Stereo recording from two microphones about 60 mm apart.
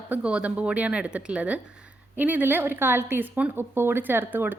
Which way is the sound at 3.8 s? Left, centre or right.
Right.